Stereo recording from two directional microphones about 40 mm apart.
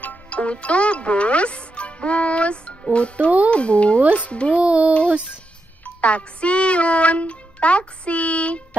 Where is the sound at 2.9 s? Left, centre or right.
Left.